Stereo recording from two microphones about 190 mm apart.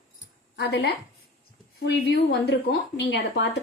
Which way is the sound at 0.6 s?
60° left (ahead or behind).